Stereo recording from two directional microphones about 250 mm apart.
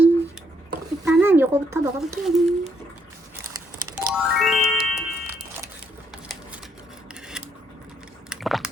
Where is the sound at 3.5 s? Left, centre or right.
Centre.